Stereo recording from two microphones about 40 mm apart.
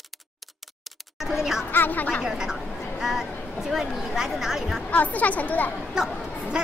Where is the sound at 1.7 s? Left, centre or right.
Left.